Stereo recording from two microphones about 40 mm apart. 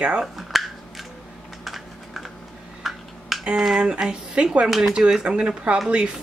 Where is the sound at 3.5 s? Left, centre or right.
Centre.